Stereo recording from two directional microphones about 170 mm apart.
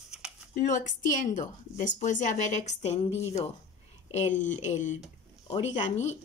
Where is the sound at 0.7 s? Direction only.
45° left (ahead or behind).